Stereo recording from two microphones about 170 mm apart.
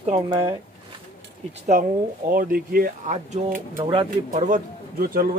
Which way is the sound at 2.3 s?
55° right (ahead or behind).